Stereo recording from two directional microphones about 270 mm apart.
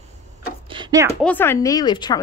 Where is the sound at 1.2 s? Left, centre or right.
Centre.